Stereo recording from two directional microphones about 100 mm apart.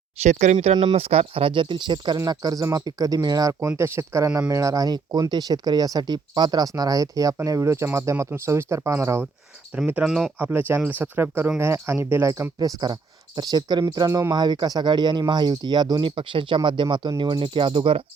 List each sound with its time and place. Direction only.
0.2 s speech: 90° right; by 2.1 s 55° right (ahead or behind)
2.1 s speech: 40° right (ahead or behind)
3.6 s speech: 25° right (ahead or behind)
9.7 s speech: 15° right (ahead or behind)
10.3 s speech: 20° right (ahead or behind)
12.3 s speech: 35° right (ahead or behind); by 18.0 s 60° right (ahead or behind)